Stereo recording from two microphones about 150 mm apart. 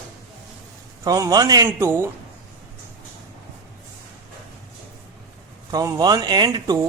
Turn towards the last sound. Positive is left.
turn(degrees=-25)  # may be behind; listen again after turning